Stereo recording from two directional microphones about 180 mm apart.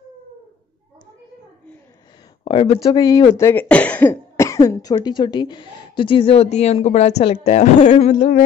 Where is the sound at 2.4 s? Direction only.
30° left (ahead or behind).